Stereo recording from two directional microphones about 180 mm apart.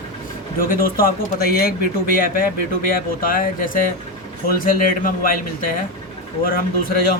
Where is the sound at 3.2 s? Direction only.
50° left (ahead or behind).